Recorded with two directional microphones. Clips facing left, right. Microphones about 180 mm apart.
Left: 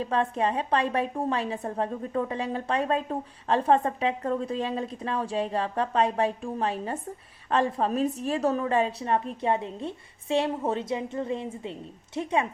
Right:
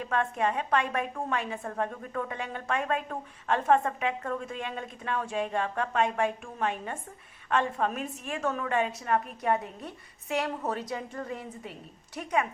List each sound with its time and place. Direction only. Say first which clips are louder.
0.0 s a woman's voice: left 3 dB; 30° left (ahead or behind)